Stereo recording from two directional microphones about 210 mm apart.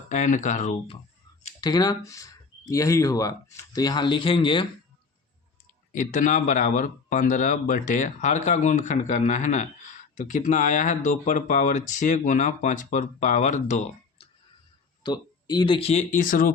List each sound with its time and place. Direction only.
0.1 s speech: 35° left (ahead or behind)
1.6 s speech: 20° left (ahead or behind)
5.9 s speech: 35° left (ahead or behind)
15.0 s speech: 20° left (ahead or behind); by 16.5 s 40° left (ahead or behind)